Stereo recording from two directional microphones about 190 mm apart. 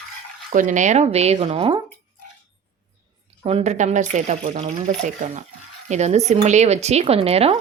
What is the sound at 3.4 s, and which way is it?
A woman's voice, 35° right (ahead or behind).